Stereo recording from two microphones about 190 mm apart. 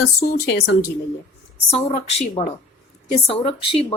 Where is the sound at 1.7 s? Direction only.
25° left (ahead or behind).